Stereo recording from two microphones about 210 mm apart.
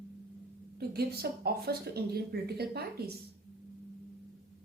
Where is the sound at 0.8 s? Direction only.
50° right (ahead or behind).